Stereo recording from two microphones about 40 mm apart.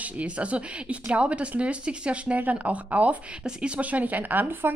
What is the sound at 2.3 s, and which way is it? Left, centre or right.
Speech, right.